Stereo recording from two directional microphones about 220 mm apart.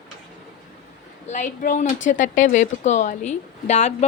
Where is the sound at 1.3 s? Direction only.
35° left (ahead or behind).